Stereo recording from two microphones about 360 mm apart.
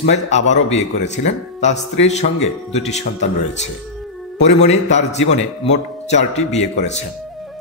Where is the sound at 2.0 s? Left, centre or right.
Centre.